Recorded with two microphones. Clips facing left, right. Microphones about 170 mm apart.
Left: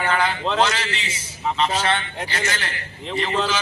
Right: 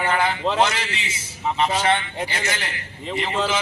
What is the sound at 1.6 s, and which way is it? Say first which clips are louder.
A man's voice: right 2 dB; 10° right (ahead or behind).